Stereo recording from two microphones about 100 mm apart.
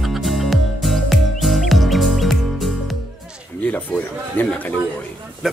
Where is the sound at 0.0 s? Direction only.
Centre (ahead or behind).